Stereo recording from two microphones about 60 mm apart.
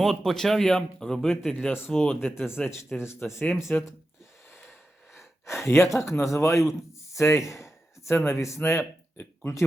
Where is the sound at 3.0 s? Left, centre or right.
Left.